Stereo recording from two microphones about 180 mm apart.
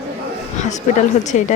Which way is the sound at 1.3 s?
45° left (ahead or behind).